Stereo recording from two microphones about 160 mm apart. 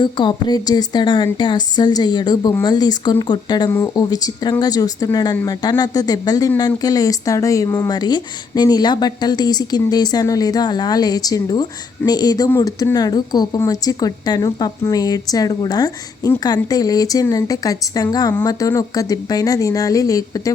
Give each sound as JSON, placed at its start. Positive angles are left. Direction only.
{"t": 0.0, "sound": "a woman's voice", "side_deg": 30}